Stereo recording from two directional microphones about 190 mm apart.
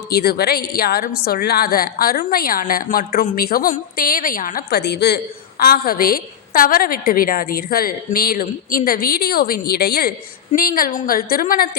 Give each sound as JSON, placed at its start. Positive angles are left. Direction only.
{"t": 0.1, "sound": "a woman's voice", "side_deg": 55}